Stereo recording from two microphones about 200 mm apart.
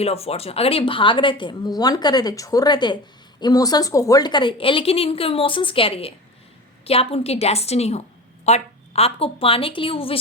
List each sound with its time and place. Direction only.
0.0 s a woman's voice: 30° left (ahead or behind)